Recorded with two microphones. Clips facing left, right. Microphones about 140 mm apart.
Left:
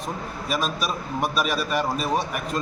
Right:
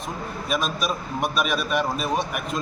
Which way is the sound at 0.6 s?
35° left (ahead or behind).